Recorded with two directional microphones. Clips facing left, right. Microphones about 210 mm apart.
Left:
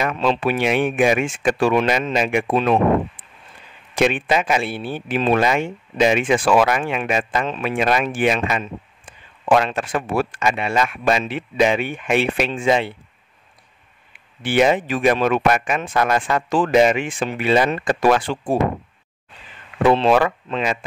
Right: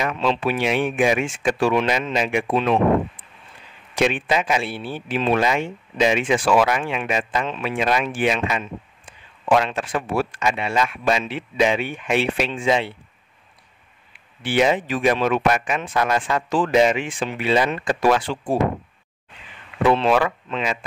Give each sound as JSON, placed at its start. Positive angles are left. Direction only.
{"t": 0.0, "sound": "speech", "side_deg": 45}
{"t": 3.9, "sound": "speech", "side_deg": 50}
{"t": 14.4, "sound": "speech", "side_deg": 50}
{"t": 19.8, "sound": "speech", "side_deg": 35}